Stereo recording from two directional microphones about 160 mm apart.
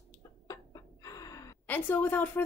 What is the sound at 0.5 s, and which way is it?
Gasp, 20° left (ahead or behind).